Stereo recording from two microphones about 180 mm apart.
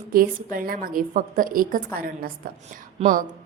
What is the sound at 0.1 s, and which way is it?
A woman's voice, 55° right (ahead or behind).